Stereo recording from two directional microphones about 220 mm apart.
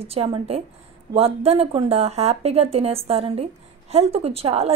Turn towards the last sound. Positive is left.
turn(degrees=-25)  # may be behind; listen again after turning